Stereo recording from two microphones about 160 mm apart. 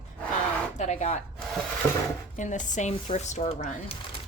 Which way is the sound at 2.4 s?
50° left (ahead or behind).